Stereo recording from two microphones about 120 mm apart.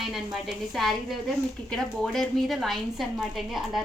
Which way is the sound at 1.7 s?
Centre (ahead or behind).